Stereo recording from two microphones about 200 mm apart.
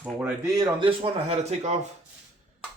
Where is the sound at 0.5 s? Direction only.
20° right (ahead or behind).